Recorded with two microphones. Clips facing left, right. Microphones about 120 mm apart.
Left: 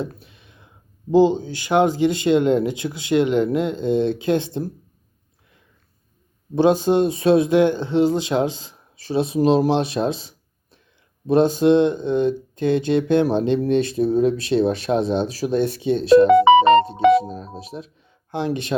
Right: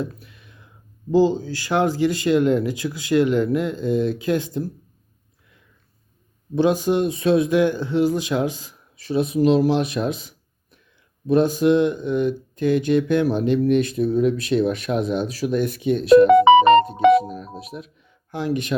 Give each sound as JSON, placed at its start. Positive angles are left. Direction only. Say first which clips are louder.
{"t": 0.0, "sound": "a sound", "louder": "even", "side_deg": 25}
{"t": 1.1, "sound": "speech", "louder": "left 2 dB", "side_deg": 20}
{"t": 6.6, "sound": "speech", "louder": "left 2 dB", "side_deg": 30}